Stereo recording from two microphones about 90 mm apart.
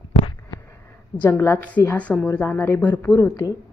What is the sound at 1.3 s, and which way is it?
A woman's voice, 30° left (ahead or behind).